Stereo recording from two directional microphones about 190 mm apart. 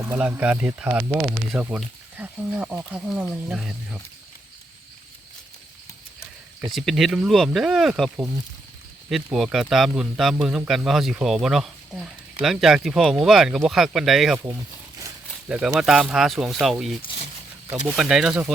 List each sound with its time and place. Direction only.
0.0 s speech: 10° right (ahead or behind)
6.7 s a man's voice: centre (ahead or behind)
14.3 s a sound: 15° right (ahead or behind)
15.4 s a man's voice: 5° right (ahead or behind)
17.0 s a sound: 25° left (ahead or behind)
17.7 s a man's voice: 10° right (ahead or behind)